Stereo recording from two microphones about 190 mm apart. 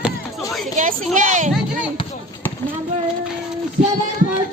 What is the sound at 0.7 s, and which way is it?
Speech, 45° right (ahead or behind).